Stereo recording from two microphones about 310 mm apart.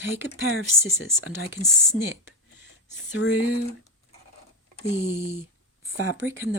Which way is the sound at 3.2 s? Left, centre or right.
Left.